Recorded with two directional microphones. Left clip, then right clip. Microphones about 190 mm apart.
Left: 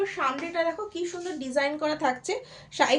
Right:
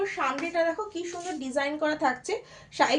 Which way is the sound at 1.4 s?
35° left (ahead or behind).